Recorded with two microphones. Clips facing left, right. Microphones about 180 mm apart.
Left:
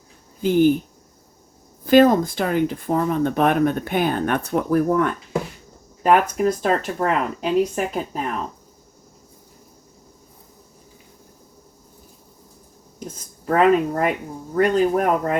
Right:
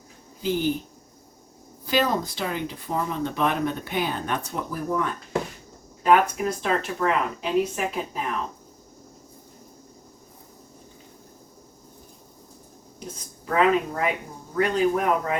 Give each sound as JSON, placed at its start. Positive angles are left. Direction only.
{"t": 0.4, "sound": "speech", "side_deg": 55}
{"t": 1.8, "sound": "speech", "side_deg": 50}
{"t": 6.0, "sound": "speech", "side_deg": 45}
{"t": 13.4, "sound": "speech", "side_deg": 45}